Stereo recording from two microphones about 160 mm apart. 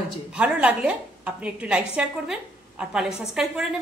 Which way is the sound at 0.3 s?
10° right (ahead or behind).